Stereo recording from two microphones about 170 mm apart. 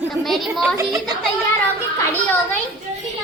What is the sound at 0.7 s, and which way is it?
Speech, 20° right (ahead or behind).